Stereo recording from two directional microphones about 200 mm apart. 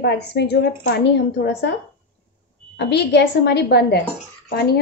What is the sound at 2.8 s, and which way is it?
A woman's voice, 55° left (ahead or behind).